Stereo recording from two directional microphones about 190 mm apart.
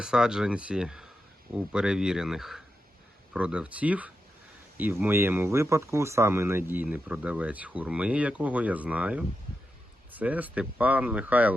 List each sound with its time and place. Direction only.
0.0 s speech: 5° right (ahead or behind)